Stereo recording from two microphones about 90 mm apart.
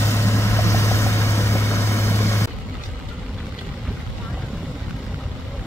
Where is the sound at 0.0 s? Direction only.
30° left (ahead or behind).